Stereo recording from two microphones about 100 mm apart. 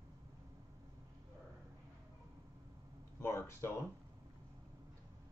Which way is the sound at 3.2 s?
25° left (ahead or behind).